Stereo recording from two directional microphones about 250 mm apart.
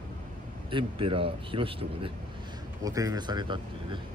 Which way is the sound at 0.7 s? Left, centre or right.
Right.